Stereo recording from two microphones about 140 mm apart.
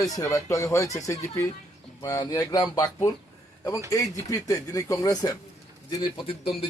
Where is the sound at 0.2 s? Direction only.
20° left (ahead or behind).